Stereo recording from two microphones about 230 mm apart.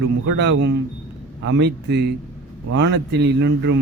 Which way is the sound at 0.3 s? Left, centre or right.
Right.